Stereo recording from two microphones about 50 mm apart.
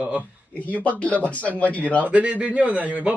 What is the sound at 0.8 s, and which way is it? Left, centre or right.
Speech, left.